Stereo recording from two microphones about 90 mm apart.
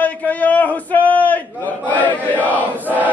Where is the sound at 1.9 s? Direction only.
20° left (ahead or behind).